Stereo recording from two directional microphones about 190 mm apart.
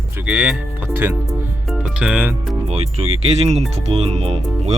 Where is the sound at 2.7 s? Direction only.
35° right (ahead or behind).